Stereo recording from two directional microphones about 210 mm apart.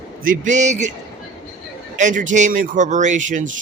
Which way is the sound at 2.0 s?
35° right (ahead or behind).